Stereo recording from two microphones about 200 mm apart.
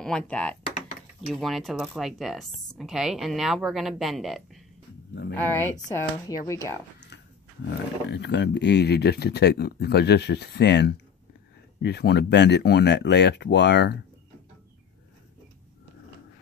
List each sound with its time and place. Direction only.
0.0 s speech: 5° left (ahead or behind)
5.5 s speech: 15° left (ahead or behind)
7.6 s speech: 60° left (ahead or behind)